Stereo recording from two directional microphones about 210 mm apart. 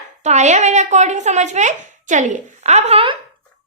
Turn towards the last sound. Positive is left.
turn(degrees=-25)  # may be behind; listen again after turning